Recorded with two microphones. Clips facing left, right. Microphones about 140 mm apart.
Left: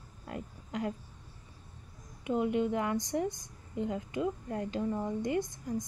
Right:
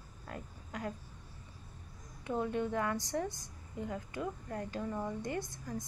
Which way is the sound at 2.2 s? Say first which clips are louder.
Left 5 dB; 15° left (ahead or behind).